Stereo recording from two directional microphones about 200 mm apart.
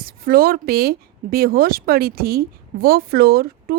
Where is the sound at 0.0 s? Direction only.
45° right (ahead or behind).